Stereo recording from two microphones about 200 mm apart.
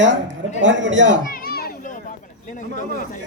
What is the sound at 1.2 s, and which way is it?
Children playing, 45° left (ahead or behind).